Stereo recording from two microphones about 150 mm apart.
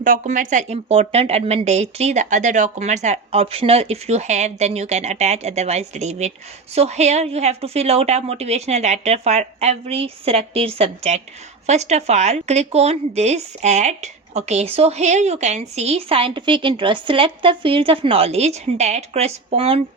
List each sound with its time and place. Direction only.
0.0 s a woman's voice: 60° right (ahead or behind)
3.4 s a woman's voice: 40° right (ahead or behind)